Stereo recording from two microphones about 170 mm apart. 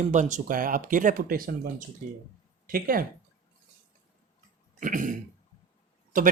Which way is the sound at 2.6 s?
60° right (ahead or behind).